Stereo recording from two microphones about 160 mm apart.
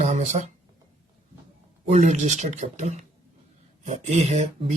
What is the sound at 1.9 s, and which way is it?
Speech, 45° right (ahead or behind).